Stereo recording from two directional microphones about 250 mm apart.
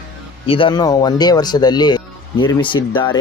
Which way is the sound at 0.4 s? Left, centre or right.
Left.